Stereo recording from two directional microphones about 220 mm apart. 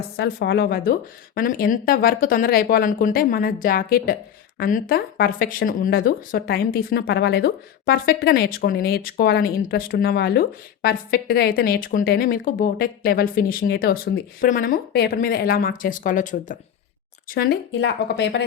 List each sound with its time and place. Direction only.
0.2 s speech: 50° left (ahead or behind)